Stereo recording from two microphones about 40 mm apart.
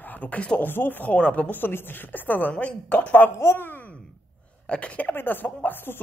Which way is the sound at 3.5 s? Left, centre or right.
Left.